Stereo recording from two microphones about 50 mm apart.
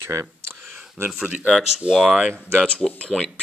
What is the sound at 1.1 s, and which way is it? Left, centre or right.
Speech, centre.